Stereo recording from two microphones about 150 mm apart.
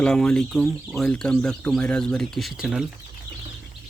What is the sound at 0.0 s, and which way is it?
Speech, 5° left (ahead or behind).